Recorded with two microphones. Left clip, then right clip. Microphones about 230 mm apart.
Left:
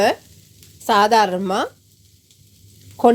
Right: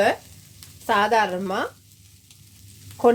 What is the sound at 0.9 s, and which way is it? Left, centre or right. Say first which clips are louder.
Speech: left 5 dB; left.